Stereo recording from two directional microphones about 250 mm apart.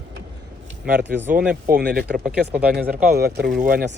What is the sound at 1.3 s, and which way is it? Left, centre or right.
Speech, right.